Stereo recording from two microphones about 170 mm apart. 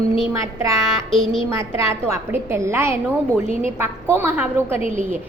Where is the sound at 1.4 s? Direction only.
15° right (ahead or behind).